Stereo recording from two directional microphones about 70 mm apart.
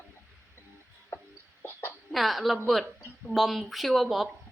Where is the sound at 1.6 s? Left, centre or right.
Left.